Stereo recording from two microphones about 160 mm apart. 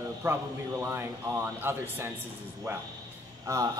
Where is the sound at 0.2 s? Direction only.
15° right (ahead or behind).